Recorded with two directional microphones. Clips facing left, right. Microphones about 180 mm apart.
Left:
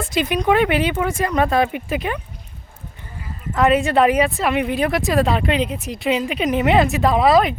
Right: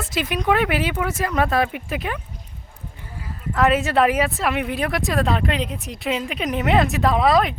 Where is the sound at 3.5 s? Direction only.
Centre (ahead or behind).